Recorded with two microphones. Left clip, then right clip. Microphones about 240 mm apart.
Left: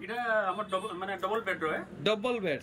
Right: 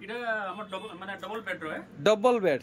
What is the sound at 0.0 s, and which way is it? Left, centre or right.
Speech, centre.